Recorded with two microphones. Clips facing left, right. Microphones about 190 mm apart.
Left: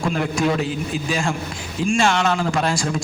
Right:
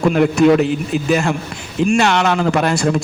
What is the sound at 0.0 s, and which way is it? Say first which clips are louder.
A man's voice: right 9 dB; 65° right (ahead or behind).